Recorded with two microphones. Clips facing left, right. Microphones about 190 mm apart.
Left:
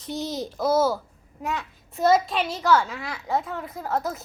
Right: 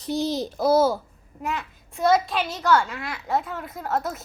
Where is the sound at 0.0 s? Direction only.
35° right (ahead or behind).